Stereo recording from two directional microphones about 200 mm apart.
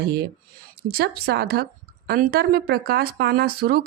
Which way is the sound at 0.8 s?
50° right (ahead or behind).